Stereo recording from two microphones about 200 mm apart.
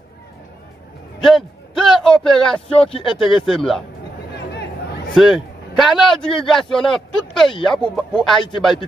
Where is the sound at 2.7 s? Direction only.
30° left (ahead or behind).